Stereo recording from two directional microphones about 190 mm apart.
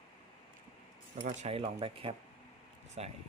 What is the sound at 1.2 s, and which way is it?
Speech, 35° right (ahead or behind).